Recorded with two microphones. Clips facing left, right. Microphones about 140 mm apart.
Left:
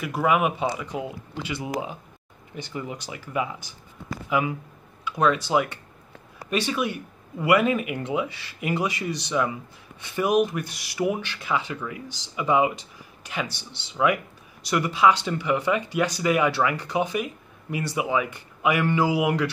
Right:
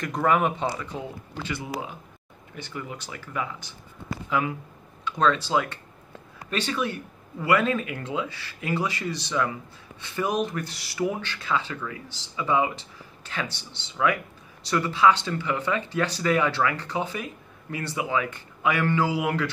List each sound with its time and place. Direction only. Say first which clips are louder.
0.0 s speech: left 1 dB; 5° left (ahead or behind)